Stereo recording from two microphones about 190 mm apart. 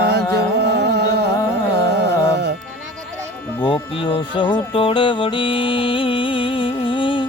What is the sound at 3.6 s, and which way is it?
Speech, 25° left (ahead or behind).